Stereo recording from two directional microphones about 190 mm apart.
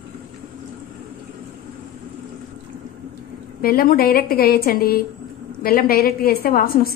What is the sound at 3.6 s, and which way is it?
A woman's voice, 50° left (ahead or behind).